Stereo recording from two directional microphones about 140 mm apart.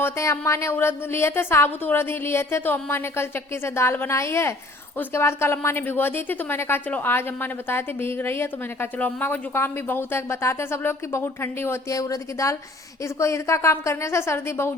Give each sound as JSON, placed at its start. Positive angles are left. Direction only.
{"t": 0.0, "sound": "a woman's voice", "side_deg": 20}